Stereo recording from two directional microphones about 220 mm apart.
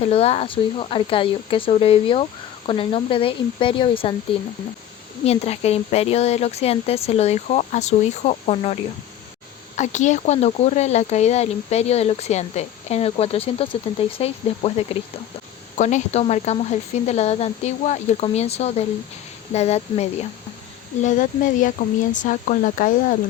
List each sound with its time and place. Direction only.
0.0 s speech: 25° left (ahead or behind)
5.2 s speech: 30° left (ahead or behind)